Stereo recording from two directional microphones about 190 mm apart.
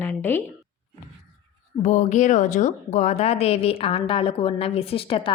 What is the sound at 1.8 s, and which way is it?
A woman's voice, 40° left (ahead or behind).